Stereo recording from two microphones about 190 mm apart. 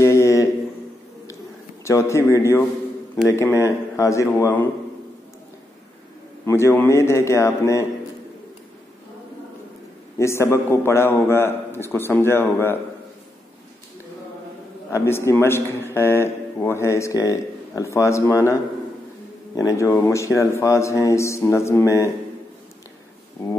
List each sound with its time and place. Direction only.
0.0 s a sound: 15° left (ahead or behind)
1.9 s a man's voice: 15° left (ahead or behind)
6.4 s a man's voice: 15° left (ahead or behind)
10.1 s a man's voice: 15° left (ahead or behind)
14.9 s a man's voice: 15° left (ahead or behind)